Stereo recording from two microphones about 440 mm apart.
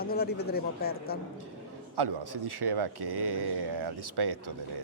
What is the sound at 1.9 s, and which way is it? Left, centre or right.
Speech, right.